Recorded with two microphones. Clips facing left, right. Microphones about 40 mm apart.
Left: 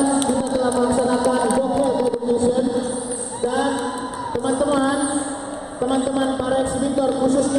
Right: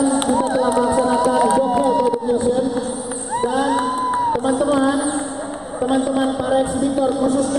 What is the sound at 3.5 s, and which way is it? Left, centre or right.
Crowd, centre.